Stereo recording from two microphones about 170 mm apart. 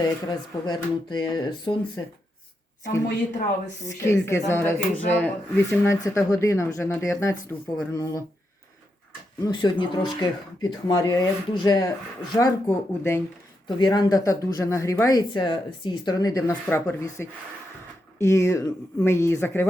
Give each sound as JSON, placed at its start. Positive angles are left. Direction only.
{"t": 0.0, "sound": "speech", "side_deg": 25}
{"t": 3.8, "sound": "a woman's voice", "side_deg": 15}
{"t": 9.4, "sound": "a woman's voice", "side_deg": 25}
{"t": 13.7, "sound": "a woman's voice", "side_deg": 25}